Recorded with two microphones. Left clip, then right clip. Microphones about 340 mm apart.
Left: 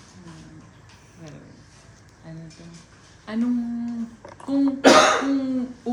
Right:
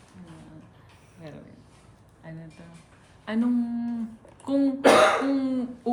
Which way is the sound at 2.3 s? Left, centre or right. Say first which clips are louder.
Left 2 dB; right.